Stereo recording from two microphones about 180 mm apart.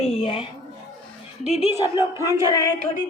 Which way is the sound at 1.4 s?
40° left (ahead or behind).